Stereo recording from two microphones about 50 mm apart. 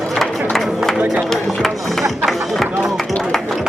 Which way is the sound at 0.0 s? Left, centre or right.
Centre.